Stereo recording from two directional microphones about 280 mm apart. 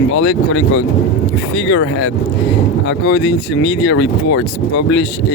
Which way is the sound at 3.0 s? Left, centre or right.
Left.